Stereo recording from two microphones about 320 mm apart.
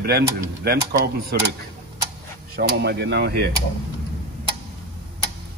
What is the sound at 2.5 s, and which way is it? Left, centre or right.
Speech, right.